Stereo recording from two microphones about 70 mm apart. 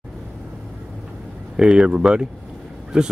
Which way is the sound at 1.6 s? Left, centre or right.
Centre.